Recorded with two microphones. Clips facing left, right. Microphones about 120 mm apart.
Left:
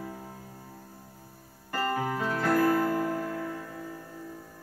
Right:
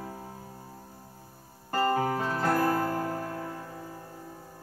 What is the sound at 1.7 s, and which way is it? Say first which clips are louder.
Music: right 3 dB; 30° right (ahead or behind).